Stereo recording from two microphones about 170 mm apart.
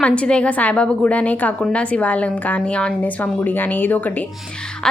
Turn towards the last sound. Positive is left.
turn(degrees=10)  # may be behind; listen again after turning